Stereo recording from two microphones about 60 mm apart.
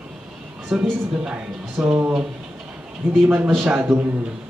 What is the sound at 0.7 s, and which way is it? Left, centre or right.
A woman's voice, centre.